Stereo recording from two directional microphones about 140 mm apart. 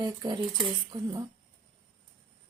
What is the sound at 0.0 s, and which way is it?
Speech, 30° right (ahead or behind).